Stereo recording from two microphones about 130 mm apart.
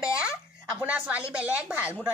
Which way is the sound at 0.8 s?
10° right (ahead or behind).